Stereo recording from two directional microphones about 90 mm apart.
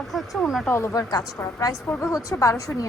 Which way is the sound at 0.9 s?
45° left (ahead or behind).